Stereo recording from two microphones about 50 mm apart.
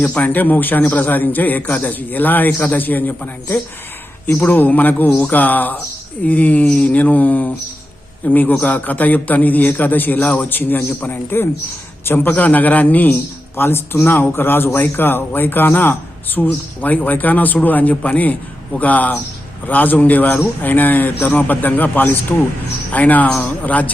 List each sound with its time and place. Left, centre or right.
0.0 s a man's voice: left
13.6 s a man's voice: left